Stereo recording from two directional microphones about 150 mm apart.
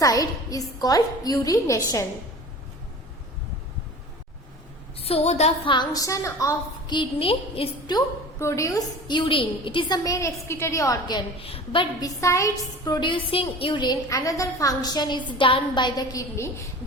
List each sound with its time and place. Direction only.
0.0 s a woman's voice: 25° left (ahead or behind)
4.9 s a woman's voice: 40° left (ahead or behind)
7.9 s a woman's voice: 20° left (ahead or behind)
10.0 s a woman's voice: 20° left (ahead or behind)
11.3 s a woman's voice: 40° left (ahead or behind); by 16.6 s 20° left (ahead or behind)